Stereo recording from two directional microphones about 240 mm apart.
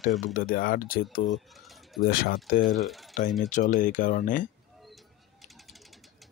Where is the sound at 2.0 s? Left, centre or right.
Left.